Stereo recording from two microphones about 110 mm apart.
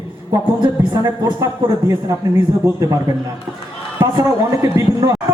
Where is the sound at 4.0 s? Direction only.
35° right (ahead or behind).